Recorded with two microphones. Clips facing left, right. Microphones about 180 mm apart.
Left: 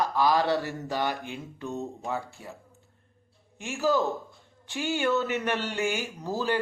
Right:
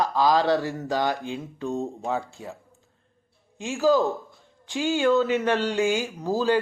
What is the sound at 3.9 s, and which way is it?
Speech, 15° right (ahead or behind).